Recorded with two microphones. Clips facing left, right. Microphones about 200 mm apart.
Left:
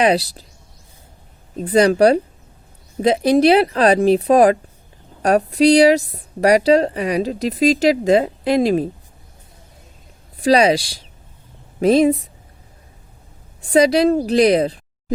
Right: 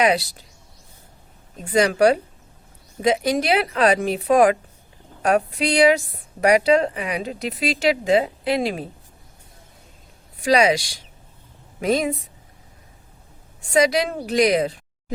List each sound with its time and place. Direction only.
0.0 s speech: 35° left (ahead or behind)
1.5 s speech: 35° left (ahead or behind)
10.4 s speech: 35° left (ahead or behind)
13.6 s speech: 35° left (ahead or behind)